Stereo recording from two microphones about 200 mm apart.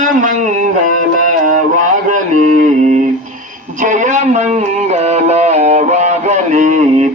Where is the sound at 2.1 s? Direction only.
40° right (ahead or behind).